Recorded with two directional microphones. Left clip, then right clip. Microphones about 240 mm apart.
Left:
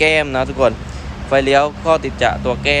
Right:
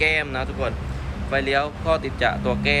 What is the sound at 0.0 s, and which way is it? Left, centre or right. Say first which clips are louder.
Speech: left 7 dB; centre.